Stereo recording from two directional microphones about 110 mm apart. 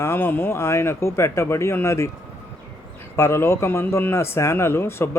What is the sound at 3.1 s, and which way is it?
Speech, 25° left (ahead or behind).